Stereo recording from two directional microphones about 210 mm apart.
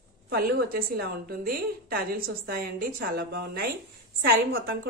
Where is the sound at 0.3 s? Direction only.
45° right (ahead or behind).